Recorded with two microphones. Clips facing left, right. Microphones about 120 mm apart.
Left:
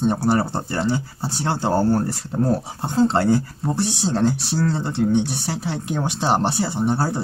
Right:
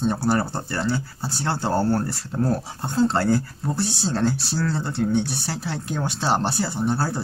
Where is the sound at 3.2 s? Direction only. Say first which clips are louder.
Left 3 dB; 15° left (ahead or behind).